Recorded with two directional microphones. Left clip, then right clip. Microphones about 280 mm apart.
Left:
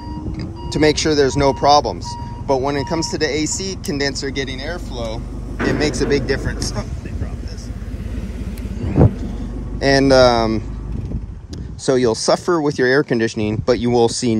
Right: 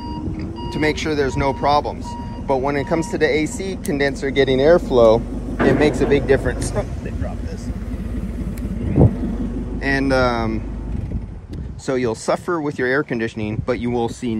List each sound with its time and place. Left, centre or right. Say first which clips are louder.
0.4 s speech: left 6 dB; centre
4.9 s speech: right 15 dB; left
5.7 s speech: right 2 dB; centre
9.8 s speech: left 6 dB; centre
11.8 s speech: left 5 dB; centre